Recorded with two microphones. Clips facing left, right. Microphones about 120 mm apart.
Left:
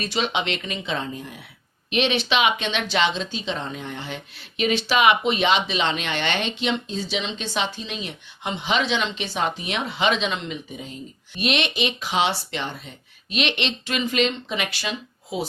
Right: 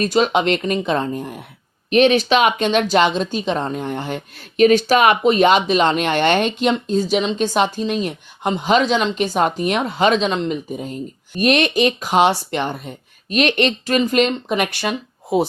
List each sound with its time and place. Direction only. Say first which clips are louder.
0.0 s a woman's voice: right 9 dB; 45° right (ahead or behind)